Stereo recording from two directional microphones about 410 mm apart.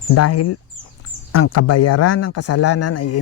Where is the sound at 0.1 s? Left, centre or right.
Left.